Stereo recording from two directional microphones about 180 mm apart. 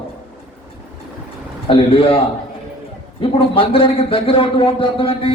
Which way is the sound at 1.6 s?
30° left (ahead or behind).